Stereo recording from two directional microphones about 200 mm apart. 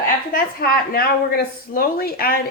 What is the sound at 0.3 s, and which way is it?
Speech, 50° left (ahead or behind).